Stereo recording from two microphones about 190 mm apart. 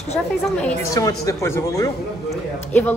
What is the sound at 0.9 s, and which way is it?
A woman's voice, 15° left (ahead or behind).